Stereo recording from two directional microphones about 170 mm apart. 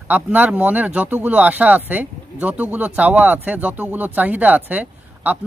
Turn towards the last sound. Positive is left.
turn(degrees=-10)  # may be behind; listen again after turning